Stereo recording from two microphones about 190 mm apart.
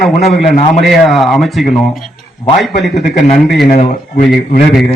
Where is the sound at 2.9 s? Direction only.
40° left (ahead or behind).